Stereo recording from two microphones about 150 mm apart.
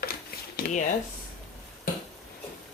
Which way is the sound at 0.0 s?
90° left.